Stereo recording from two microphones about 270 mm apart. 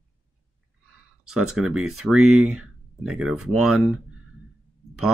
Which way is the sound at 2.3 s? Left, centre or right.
Right.